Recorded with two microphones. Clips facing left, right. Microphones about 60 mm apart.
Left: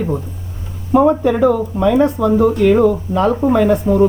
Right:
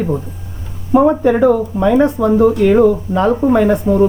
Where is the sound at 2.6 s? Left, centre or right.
Centre.